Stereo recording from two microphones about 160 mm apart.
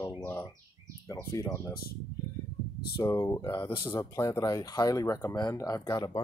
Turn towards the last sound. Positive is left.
turn(degrees=25)  # may be behind; listen again after turning